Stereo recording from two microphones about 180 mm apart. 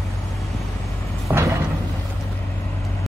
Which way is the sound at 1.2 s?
15° right (ahead or behind).